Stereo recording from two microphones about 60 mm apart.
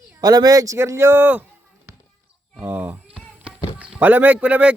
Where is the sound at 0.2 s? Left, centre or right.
Right.